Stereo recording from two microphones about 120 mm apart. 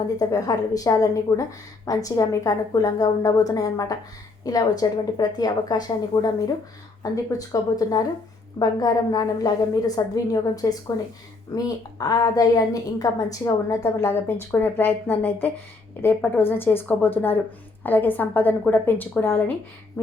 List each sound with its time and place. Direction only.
0.2 s a woman's voice: 30° left (ahead or behind)